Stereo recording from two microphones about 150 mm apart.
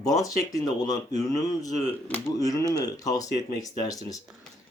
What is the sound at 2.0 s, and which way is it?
Speech, 10° left (ahead or behind).